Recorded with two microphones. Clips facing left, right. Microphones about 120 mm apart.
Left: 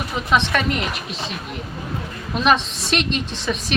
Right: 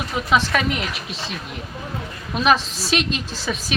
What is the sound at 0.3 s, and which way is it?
A woman's voice, centre (ahead or behind).